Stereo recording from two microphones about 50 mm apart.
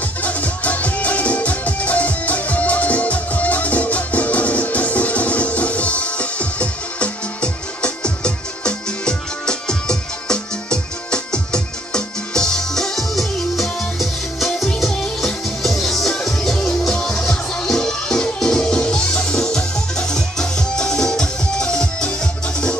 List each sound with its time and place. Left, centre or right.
0.2 s music: left; by 14.7 s centre
14.9 s music: centre